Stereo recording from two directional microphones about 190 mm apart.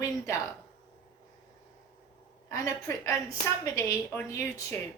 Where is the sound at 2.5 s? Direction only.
15° left (ahead or behind).